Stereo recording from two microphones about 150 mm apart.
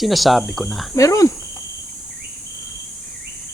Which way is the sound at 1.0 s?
20° left (ahead or behind).